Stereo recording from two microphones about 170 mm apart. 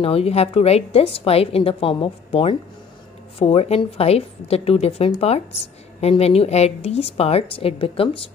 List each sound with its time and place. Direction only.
0.0 s a woman's voice: 35° left (ahead or behind)